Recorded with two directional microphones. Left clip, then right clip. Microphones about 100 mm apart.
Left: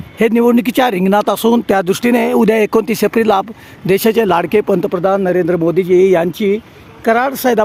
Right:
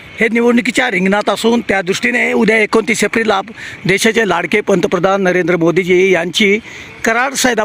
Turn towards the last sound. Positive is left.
turn(degrees=-15)  # may be behind; listen again after turning